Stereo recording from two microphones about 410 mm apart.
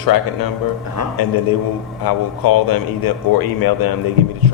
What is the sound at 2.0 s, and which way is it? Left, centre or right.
A man's voice, left.